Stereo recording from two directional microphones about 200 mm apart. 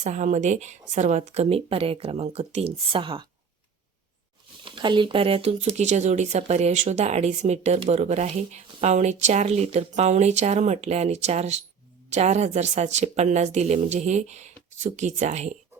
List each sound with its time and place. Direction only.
0.0 s speech: 35° right (ahead or behind)
4.6 s speech: 25° right (ahead or behind)